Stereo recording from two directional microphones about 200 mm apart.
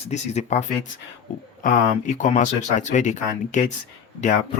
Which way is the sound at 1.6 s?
40° left (ahead or behind).